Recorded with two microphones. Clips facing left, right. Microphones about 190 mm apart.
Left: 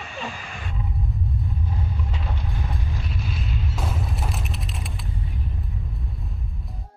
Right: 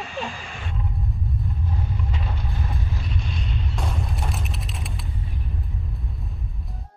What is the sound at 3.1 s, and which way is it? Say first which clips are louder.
Boom: even; 5° left (ahead or behind).